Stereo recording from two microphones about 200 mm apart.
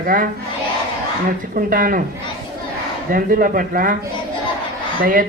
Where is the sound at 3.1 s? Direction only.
45° right (ahead or behind).